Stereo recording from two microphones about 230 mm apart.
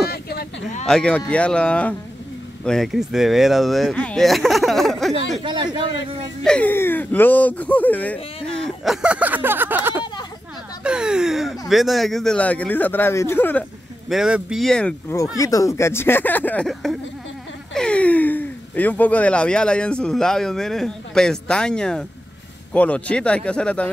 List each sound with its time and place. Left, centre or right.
0.1 s a sound: left
0.8 s speech: centre
5.4 s a man's voice: centre
6.4 s a man's voice: centre